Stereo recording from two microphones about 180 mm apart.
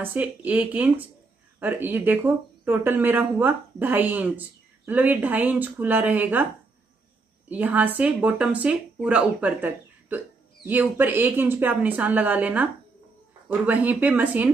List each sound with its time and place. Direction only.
0.0 s speech: 10° right (ahead or behind)
7.4 s speech: 10° right (ahead or behind)
13.7 s speech: 10° right (ahead or behind)